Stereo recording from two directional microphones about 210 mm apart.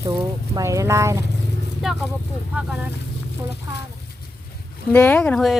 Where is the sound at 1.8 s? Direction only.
Centre (ahead or behind).